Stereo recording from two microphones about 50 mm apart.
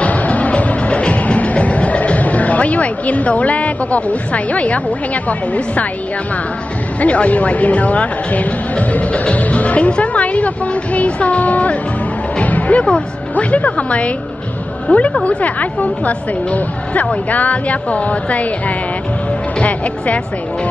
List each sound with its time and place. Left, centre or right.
0.0 s music: left
7.0 s speech: left
12.4 s music: left
12.8 s speech: left